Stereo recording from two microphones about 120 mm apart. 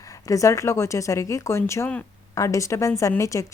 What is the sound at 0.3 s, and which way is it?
A woman's voice, 25° left (ahead or behind).